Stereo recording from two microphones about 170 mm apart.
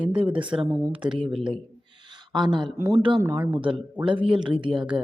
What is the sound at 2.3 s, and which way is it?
Speech, 25° right (ahead or behind).